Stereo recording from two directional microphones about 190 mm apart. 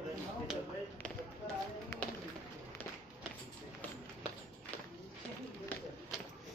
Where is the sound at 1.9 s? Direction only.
15° left (ahead or behind).